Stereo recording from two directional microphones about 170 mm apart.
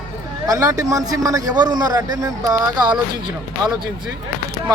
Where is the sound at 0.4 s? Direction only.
20° right (ahead or behind).